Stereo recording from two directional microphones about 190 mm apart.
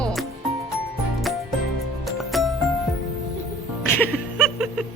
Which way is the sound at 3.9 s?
5° left (ahead or behind).